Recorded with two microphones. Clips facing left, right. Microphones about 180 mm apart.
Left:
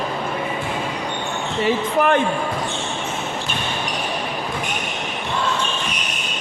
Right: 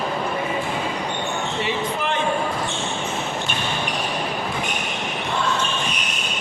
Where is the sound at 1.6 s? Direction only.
55° left (ahead or behind).